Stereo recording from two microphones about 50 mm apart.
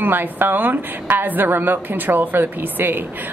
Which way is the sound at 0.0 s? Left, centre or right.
Right.